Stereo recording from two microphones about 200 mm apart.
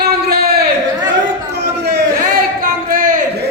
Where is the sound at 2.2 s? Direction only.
45° right (ahead or behind).